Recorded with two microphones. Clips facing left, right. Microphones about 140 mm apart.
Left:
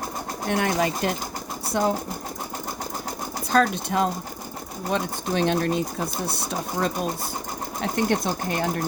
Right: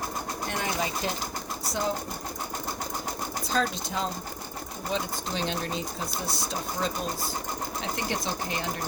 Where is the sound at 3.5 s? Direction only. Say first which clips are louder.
Left 8 dB; 55° left (ahead or behind).